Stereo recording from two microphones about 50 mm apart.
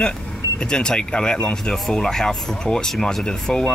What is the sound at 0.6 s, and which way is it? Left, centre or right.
Speech, centre.